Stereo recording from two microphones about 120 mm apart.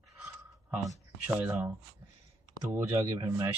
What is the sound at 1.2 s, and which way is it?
Speech, 15° right (ahead or behind).